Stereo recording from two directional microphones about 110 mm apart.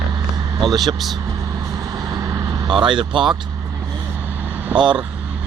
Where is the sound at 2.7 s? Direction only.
50° right (ahead or behind).